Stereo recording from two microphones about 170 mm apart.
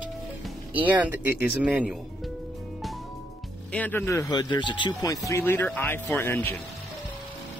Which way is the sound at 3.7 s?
10° left (ahead or behind).